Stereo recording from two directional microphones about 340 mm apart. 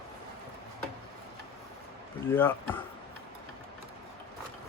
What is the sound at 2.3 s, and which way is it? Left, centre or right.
Speech, centre.